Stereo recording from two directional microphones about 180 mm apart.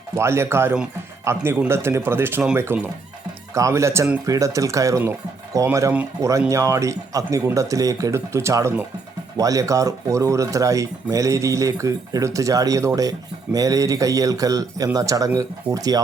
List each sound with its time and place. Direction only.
0.2 s speech: 15° right (ahead or behind)